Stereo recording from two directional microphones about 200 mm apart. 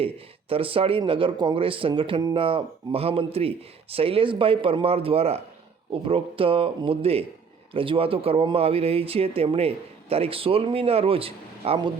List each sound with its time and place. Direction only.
0.0 s speech: 25° right (ahead or behind)